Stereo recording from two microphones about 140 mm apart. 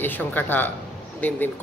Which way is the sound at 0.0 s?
15° left (ahead or behind).